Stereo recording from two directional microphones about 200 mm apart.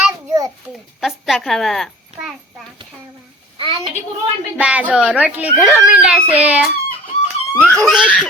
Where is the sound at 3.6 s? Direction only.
25° right (ahead or behind).